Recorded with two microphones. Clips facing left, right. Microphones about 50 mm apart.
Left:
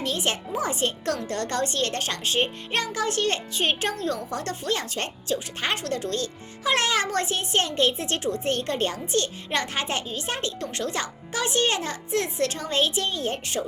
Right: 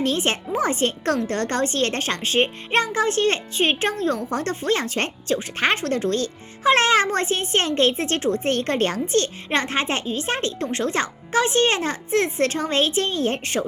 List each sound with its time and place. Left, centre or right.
0.0 s speech: right